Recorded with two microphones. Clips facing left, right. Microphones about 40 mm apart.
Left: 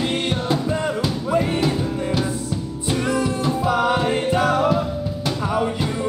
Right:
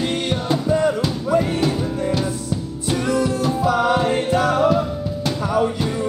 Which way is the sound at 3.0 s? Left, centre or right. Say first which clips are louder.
Right 2 dB; centre.